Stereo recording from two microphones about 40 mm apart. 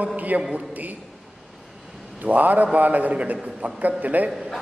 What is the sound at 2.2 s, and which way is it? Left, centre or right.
A man's voice, right.